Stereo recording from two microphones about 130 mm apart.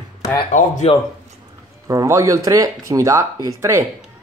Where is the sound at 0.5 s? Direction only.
70° left (ahead or behind).